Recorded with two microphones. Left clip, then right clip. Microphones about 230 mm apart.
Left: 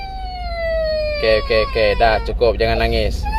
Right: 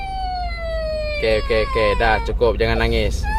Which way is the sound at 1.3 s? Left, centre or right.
Centre.